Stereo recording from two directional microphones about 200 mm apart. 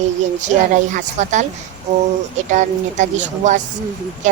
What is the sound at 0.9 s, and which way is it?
Speech, 35° right (ahead or behind).